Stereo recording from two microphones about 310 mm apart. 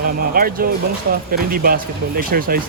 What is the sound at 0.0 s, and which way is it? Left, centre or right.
Speech, right.